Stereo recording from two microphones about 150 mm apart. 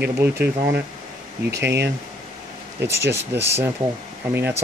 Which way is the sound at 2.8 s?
15° right (ahead or behind).